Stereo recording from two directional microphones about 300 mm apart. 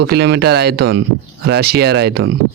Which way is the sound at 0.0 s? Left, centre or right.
Right.